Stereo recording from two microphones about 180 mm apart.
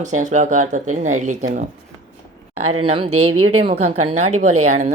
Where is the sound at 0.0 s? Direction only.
40° right (ahead or behind).